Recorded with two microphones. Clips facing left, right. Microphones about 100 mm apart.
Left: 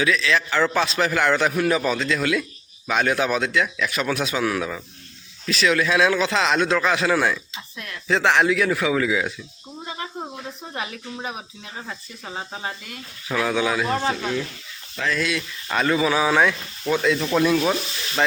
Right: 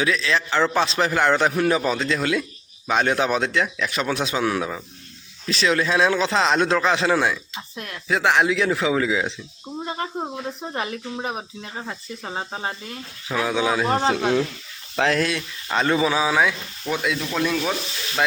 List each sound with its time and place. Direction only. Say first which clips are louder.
0.0 s a man's voice: left 1 dB; 30° right (ahead or behind)
8.0 s a man's voice: left 1 dB; 10° right (ahead or behind)
9.8 s cricket: right 4 dB; 40° right (ahead or behind)
10.8 s speech: right 2 dB; 35° right (ahead or behind)
13.3 s speech: even; 15° right (ahead or behind)
14.2 s speech: right 5 dB; 55° right (ahead or behind)
15.2 s a man's voice: right 1 dB; 35° right (ahead or behind); by 16.3 s 15° right (ahead or behind)
16.3 s speech: left 1 dB; 5° right (ahead or behind)
17.2 s speech: left 4 dB; 5° left (ahead or behind)